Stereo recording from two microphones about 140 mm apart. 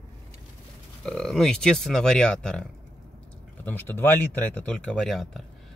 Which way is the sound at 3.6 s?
15° left (ahead or behind).